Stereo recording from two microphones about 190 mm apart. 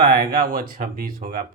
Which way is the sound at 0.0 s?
50° right (ahead or behind).